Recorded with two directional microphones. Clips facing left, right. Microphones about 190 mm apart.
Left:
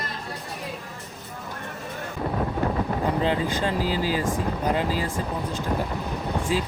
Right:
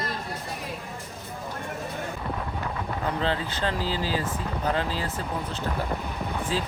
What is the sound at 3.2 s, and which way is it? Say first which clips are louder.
Speech: left 3 dB; 10° left (ahead or behind).